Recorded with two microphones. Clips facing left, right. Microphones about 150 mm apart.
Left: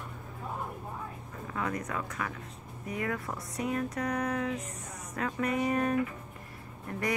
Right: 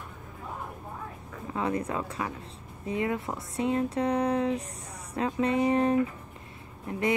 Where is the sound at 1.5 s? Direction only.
25° right (ahead or behind).